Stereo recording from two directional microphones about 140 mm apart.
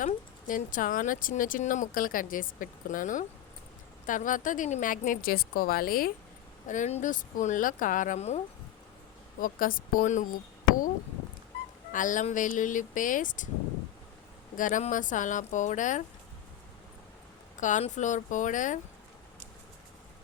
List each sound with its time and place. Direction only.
0.0 s speech: 70° left (ahead or behind); by 6.1 s 90° left
6.7 s speech: 60° left (ahead or behind)
9.4 s speech: 85° left
11.9 s speech: 65° left (ahead or behind)
14.5 s speech: 70° left (ahead or behind)
17.6 s speech: 60° left (ahead or behind)